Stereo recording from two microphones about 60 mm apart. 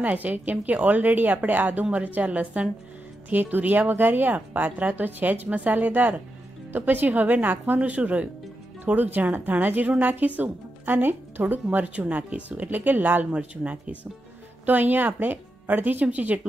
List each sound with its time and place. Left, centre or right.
0.0 s a woman's voice: right